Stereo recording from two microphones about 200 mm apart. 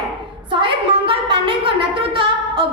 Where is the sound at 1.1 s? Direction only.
25° right (ahead or behind).